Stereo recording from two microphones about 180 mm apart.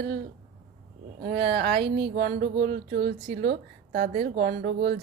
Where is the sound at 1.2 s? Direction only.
70° right (ahead or behind).